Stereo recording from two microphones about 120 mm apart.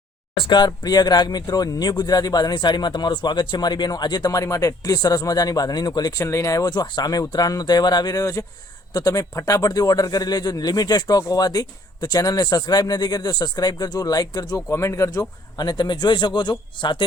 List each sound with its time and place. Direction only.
0.3 s speech: 40° left (ahead or behind); by 15.2 s 25° left (ahead or behind)
15.5 s speech: 40° left (ahead or behind)